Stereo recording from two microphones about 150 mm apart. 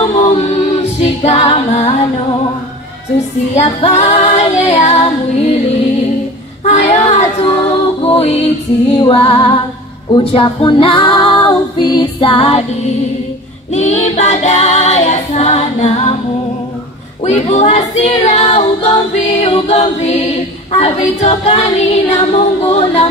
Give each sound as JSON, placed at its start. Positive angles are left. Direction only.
{"t": 0.8, "sound": "music", "side_deg": 45}
{"t": 3.5, "sound": "female singing", "side_deg": 45}
{"t": 6.6, "sound": "child singing", "side_deg": 50}
{"t": 8.0, "sound": "female singing", "side_deg": 40}
{"t": 13.7, "sound": "a capella", "side_deg": 50}
{"t": 17.2, "sound": "a capella", "side_deg": 50}